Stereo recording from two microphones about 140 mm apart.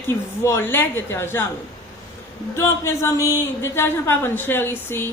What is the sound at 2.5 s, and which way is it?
Speech, 20° left (ahead or behind).